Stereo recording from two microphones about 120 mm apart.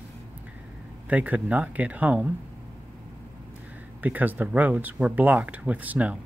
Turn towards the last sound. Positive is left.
turn(degrees=-10)  # may be behind; listen again after turning